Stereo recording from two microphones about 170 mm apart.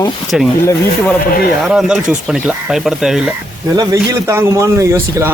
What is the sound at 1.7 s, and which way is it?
Speech, 5° right (ahead or behind).